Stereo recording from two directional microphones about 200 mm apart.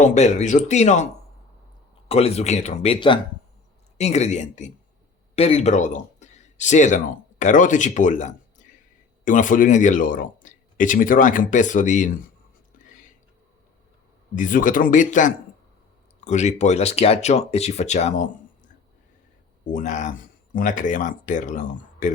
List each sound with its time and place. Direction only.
0.0 s speech: 35° left (ahead or behind)
2.0 s speech: 30° left (ahead or behind)
12.8 s a sound: 40° left (ahead or behind)
14.3 s speech: 40° left (ahead or behind)
19.7 s speech: 35° left (ahead or behind)